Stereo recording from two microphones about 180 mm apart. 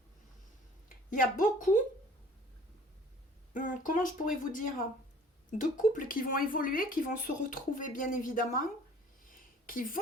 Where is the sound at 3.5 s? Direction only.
45° left (ahead or behind).